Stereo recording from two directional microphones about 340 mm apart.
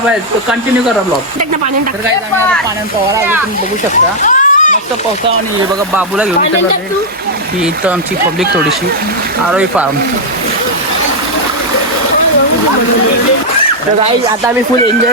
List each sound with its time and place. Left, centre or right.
4.2 s a sound: left
5.9 s speech: centre
9.5 s speech: centre